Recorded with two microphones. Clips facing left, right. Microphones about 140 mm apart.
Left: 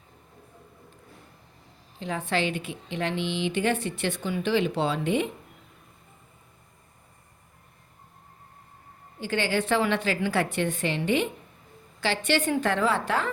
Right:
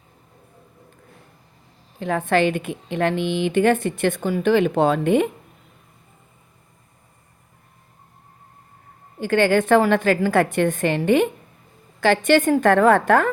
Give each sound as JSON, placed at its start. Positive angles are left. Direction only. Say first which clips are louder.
{"t": 2.0, "sound": "a woman's voice", "louder": "right 8 dB", "side_deg": -55}
{"t": 9.1, "sound": "a woman's voice", "louder": "right 9 dB", "side_deg": -55}